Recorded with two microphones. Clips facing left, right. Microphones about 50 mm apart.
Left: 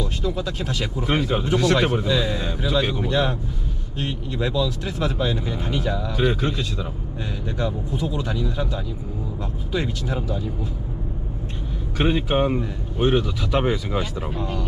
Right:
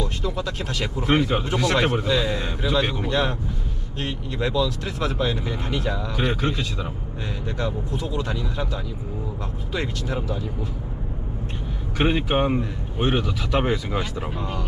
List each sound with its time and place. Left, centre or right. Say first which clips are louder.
0.3 s speech: left 1 dB; right
1.0 s a man's voice: right 2 dB; centre
3.1 s speech: left 2 dB; centre
4.5 s speech: even; right
5.5 s speech: left 1 dB; right
5.8 s a man's voice: left 5 dB; centre
7.6 s speech: left 2 dB; centre
8.1 s speech: even; right
11.9 s a man's voice: left 1 dB; centre